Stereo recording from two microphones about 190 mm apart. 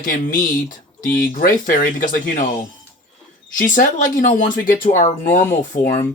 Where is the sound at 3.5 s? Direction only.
45° left (ahead or behind).